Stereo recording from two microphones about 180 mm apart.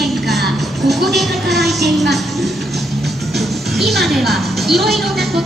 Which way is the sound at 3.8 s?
Centre (ahead or behind).